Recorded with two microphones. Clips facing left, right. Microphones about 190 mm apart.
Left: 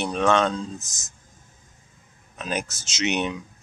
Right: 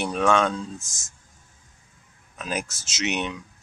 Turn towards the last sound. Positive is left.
turn(degrees=0)  # may be behind; listen again after turning